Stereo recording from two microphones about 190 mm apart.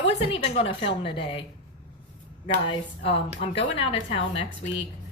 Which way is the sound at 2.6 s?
30° left (ahead or behind).